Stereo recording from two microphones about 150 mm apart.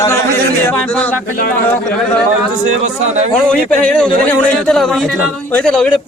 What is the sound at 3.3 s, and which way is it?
A man's voice, 5° left (ahead or behind).